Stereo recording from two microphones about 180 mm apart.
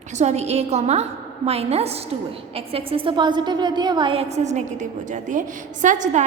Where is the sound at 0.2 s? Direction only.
35° right (ahead or behind).